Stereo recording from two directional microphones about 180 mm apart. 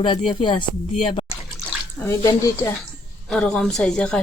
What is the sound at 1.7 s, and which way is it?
Bathtub, 5° right (ahead or behind).